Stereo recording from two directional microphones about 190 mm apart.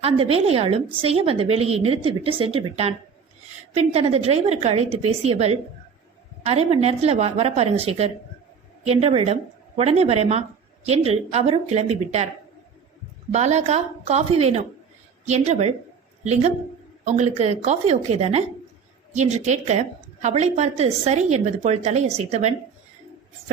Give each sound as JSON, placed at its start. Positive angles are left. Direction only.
{"t": 0.0, "sound": "a woman's voice", "side_deg": -30}
{"t": 13.3, "sound": "a woman's voice", "side_deg": -35}
{"t": 17.1, "sound": "a woman's voice", "side_deg": -35}